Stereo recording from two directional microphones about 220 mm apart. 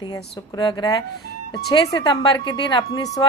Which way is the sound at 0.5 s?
20° left (ahead or behind).